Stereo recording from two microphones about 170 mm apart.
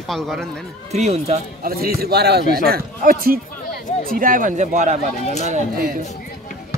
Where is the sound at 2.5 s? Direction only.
65° right (ahead or behind); by 5.1 s 45° right (ahead or behind).